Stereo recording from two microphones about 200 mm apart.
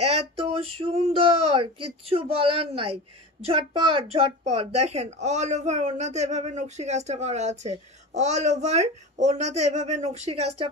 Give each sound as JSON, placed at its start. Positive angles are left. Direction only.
{"t": 0.0, "sound": "speech", "side_deg": -30}